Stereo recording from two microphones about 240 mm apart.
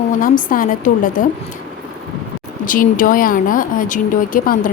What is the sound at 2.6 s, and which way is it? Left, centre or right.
Speech, left.